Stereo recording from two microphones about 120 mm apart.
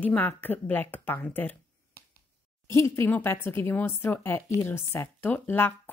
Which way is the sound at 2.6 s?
25° left (ahead or behind).